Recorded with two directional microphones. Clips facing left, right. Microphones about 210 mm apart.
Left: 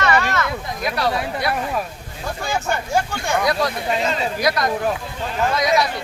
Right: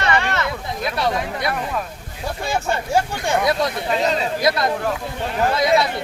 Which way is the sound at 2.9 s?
25° right (ahead or behind).